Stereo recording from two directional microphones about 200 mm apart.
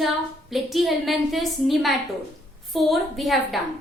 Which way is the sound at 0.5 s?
Centre (ahead or behind).